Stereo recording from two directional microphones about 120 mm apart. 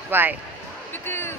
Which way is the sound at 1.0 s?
20° left (ahead or behind).